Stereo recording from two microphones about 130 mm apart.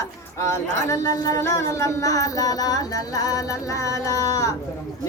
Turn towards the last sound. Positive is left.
turn(degrees=25)  # may be behind; listen again after turning